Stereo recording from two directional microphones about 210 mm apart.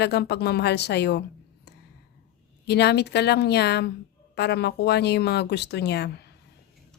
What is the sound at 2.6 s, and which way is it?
A woman's voice, 50° left (ahead or behind).